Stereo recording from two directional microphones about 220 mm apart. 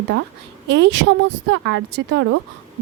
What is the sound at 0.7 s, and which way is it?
A woman's voice, 50° right (ahead or behind).